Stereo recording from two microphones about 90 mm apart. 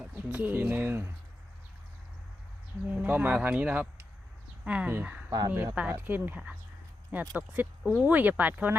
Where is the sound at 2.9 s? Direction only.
20° right (ahead or behind).